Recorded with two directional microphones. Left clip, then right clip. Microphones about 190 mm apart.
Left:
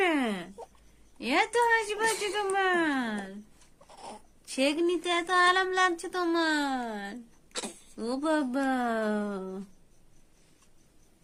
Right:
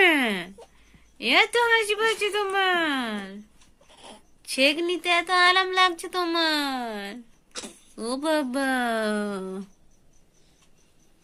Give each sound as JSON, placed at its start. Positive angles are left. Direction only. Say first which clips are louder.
{"t": 0.0, "sound": "a sound", "louder": "right 8 dB", "side_deg": -15}
{"t": 1.2, "sound": "speech", "louder": "right 5 dB", "side_deg": -20}
{"t": 4.4, "sound": "speech", "louder": "right 5 dB", "side_deg": -15}
{"t": 7.5, "sound": "speech", "louder": "left 1 dB", "side_deg": 15}
{"t": 7.9, "sound": "speech", "louder": "right 4 dB", "side_deg": -10}